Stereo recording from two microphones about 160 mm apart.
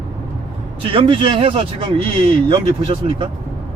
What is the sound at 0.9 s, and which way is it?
Speech, 30° right (ahead or behind).